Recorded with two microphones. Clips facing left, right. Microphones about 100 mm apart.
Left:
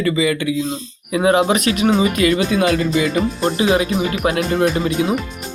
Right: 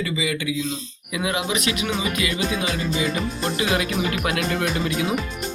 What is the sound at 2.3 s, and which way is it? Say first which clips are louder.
Speech: left 8 dB; 65° left (ahead or behind).